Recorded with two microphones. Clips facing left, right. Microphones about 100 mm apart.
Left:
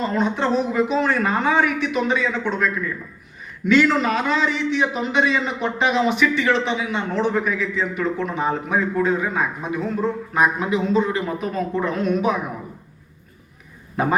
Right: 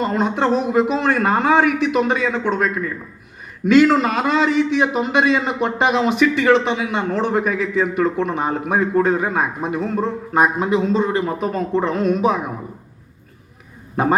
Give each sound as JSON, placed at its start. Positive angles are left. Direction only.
{"t": 0.0, "sound": "a man's voice", "side_deg": -50}
{"t": 3.7, "sound": "a man's voice", "side_deg": -45}
{"t": 13.9, "sound": "a man's voice", "side_deg": -40}